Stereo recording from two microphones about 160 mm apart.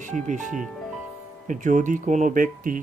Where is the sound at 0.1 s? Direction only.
50° right (ahead or behind).